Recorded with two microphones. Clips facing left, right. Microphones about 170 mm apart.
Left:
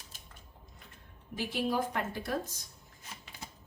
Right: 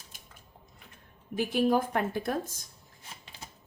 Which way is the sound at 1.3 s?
50° right (ahead or behind).